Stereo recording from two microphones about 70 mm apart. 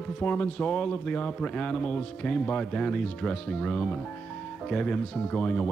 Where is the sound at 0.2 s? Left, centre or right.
Left.